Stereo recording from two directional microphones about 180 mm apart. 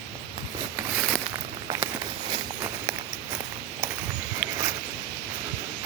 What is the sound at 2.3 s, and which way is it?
Walk, 20° right (ahead or behind).